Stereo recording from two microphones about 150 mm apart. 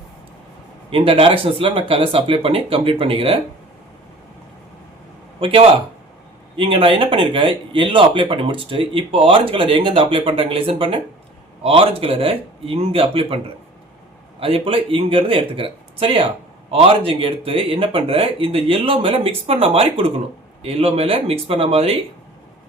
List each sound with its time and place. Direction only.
0.9 s speech: 35° right (ahead or behind)
5.4 s speech: 40° right (ahead or behind)